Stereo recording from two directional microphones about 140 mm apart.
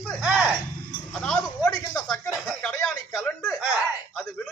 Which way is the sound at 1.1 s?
Centre (ahead or behind).